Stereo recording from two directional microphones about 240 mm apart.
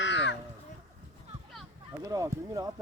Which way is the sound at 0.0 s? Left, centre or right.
Left.